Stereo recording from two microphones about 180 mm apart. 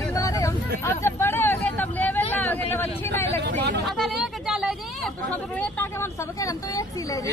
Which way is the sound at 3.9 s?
Centre (ahead or behind).